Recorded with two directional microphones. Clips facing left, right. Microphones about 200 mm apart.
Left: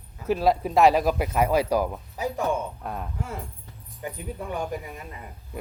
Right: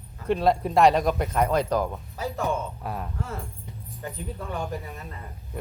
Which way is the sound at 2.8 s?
Centre (ahead or behind).